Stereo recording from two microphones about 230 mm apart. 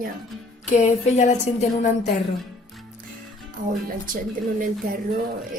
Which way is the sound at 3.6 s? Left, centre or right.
Right.